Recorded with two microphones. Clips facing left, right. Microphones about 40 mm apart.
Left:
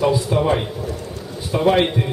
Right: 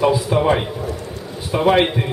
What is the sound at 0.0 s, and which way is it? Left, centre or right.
A man's voice, centre.